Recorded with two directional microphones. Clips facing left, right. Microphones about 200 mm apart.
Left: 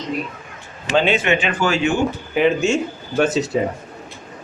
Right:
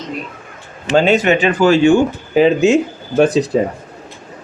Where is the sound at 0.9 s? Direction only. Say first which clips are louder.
Right 5 dB; 40° right (ahead or behind).